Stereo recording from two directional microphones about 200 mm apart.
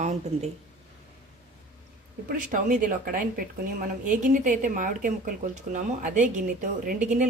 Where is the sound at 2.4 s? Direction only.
40° right (ahead or behind).